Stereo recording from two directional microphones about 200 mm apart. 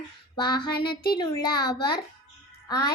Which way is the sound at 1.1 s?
20° left (ahead or behind).